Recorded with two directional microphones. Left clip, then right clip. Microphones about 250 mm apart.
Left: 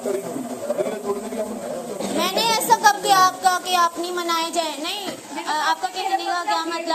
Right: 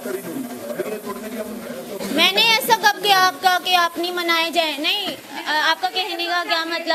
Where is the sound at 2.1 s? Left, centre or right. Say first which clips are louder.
Right 5 dB; right.